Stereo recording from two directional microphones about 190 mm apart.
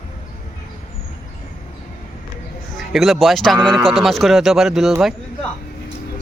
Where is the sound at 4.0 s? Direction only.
Centre (ahead or behind).